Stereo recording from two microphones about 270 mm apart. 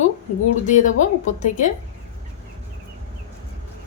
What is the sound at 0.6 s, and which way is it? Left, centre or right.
A woman's voice, left.